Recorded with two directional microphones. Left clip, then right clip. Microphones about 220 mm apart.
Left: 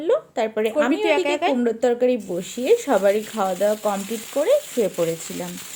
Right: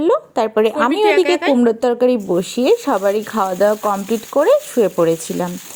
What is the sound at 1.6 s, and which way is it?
Speech, 25° right (ahead or behind).